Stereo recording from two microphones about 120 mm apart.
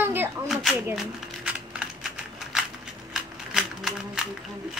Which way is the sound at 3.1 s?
5° right (ahead or behind).